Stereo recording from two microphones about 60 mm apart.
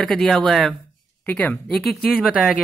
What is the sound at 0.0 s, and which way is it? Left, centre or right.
Speech, centre.